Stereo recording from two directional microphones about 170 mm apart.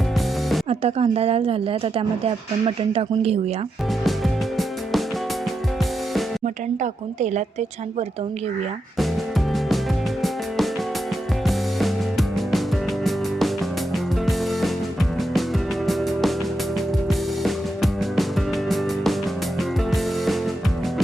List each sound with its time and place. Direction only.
0.7 s speech: 35° right (ahead or behind)
4.0 s music: centre (ahead or behind)
11.4 s music: centre (ahead or behind)
13.9 s music: centre (ahead or behind)
15.9 s music: centre (ahead or behind)